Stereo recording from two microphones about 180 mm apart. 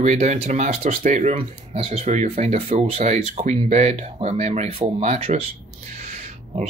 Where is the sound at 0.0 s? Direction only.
40° right (ahead or behind).